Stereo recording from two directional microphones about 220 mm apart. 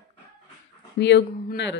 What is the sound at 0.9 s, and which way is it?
Speech, 50° left (ahead or behind).